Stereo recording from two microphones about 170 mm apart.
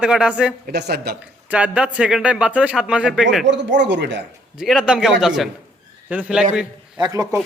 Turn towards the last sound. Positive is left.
turn(degrees=-20)  # may be behind; listen again after turning